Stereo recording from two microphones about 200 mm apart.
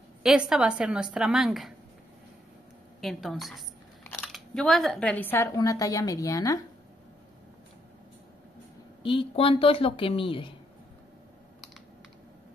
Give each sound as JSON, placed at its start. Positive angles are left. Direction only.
{"t": 0.2, "sound": "a woman's voice", "side_deg": -5}
{"t": 3.0, "sound": "a woman's voice", "side_deg": 0}
{"t": 4.0, "sound": "biting", "side_deg": 10}
{"t": 4.3, "sound": "speech", "side_deg": 0}
{"t": 9.0, "sound": "a woman's voice", "side_deg": 25}